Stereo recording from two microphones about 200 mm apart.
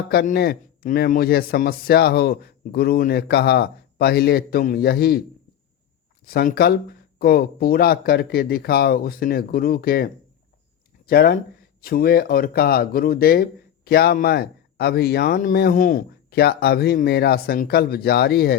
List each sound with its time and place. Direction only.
0.1 s speech: 50° left (ahead or behind)
6.2 s speech: 50° left (ahead or behind)